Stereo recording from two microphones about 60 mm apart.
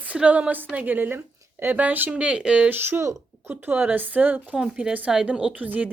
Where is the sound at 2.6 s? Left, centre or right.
Right.